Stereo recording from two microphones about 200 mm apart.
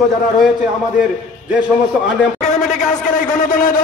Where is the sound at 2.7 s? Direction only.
35° left (ahead or behind).